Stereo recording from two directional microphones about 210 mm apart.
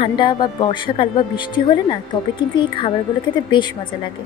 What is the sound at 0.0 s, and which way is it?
A woman's voice, 20° left (ahead or behind).